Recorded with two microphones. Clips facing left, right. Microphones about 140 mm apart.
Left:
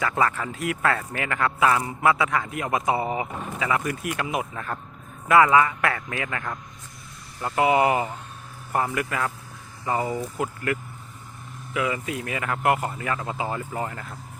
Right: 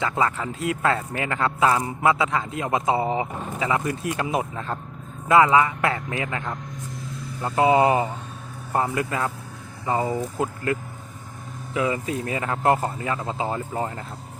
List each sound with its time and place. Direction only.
0.0 s speech: 20° right (ahead or behind)